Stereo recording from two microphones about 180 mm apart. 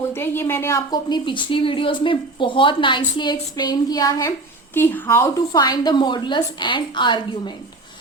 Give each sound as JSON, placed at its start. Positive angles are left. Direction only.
{"t": 0.1, "sound": "a woman's voice", "side_deg": 10}